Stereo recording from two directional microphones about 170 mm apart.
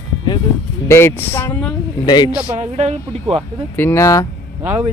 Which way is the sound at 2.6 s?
40° right (ahead or behind).